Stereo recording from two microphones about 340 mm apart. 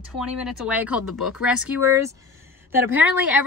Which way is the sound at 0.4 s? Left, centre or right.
Centre.